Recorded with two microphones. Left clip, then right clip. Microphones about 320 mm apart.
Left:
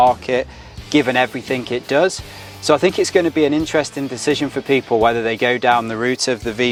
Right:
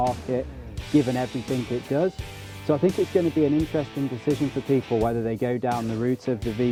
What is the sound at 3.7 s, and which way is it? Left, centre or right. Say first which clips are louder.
Speech: left 8 dB; centre.